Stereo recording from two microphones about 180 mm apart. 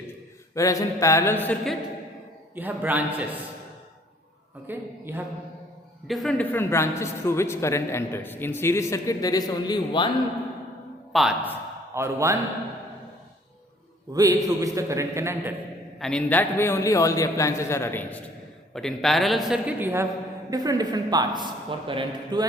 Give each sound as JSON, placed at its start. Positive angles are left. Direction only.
{"t": 0.5, "sound": "a man's voice", "side_deg": 15}
{"t": 2.6, "sound": "a man's voice", "side_deg": -10}
{"t": 4.6, "sound": "a man's voice", "side_deg": -10}
{"t": 6.1, "sound": "a man's voice", "side_deg": 0}
{"t": 11.1, "sound": "a woman's voice", "side_deg": 0}
{"t": 11.9, "sound": "a man's voice", "side_deg": -15}
{"t": 14.1, "sound": "a man's voice", "side_deg": -20}
{"t": 16.0, "sound": "a man's voice", "side_deg": 5}